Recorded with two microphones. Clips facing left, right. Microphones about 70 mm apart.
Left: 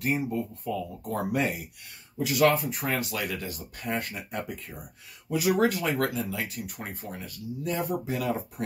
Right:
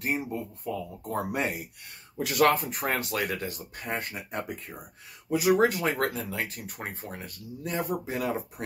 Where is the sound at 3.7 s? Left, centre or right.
Right.